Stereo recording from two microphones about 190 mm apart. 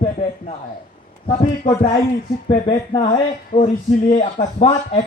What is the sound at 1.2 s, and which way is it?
Speech, 25° left (ahead or behind).